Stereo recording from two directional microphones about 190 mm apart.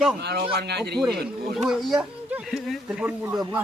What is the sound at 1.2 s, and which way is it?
Speech, 5° right (ahead or behind).